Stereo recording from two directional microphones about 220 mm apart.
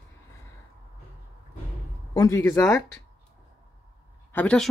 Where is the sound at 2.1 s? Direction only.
15° left (ahead or behind).